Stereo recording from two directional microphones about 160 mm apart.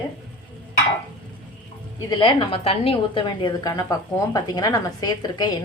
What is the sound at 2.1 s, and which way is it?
A woman's voice, 30° left (ahead or behind).